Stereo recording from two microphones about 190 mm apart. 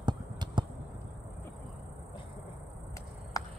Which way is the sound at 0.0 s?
25° right (ahead or behind).